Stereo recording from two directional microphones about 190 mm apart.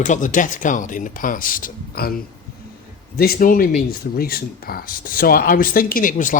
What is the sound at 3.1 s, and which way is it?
Speech, 55° left (ahead or behind).